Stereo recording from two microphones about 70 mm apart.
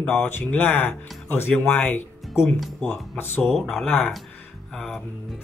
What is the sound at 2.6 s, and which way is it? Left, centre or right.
Speech, centre.